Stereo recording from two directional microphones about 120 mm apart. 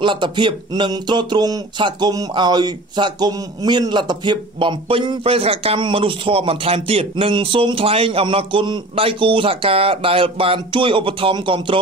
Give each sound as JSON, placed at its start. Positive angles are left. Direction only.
{"t": 0.0, "sound": "speech", "side_deg": -40}